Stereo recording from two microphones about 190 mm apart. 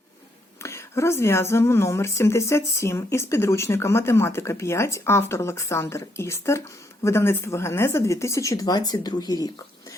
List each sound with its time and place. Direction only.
0.6 s a woman's voice: 15° left (ahead or behind)